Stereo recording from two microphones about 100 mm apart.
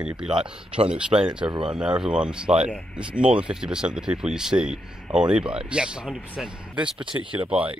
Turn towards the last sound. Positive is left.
turn(degrees=-10)  # may be behind; listen again after turning